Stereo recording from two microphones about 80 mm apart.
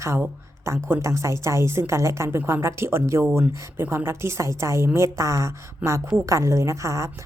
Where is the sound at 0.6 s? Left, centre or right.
Right.